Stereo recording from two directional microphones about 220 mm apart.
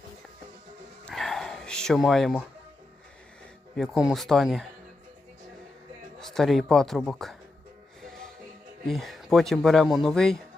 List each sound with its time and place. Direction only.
1.0 s a sound: centre (ahead or behind)
3.8 s a man's voice: centre (ahead or behind)
6.1 s a man's voice: centre (ahead or behind)
8.0 s music: centre (ahead or behind)
8.9 s a man's voice: centre (ahead or behind)